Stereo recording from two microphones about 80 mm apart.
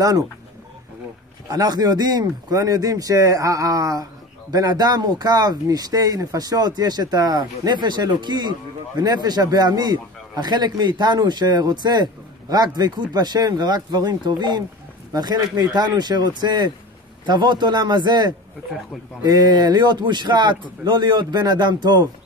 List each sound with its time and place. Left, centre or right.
1.5 s speech: right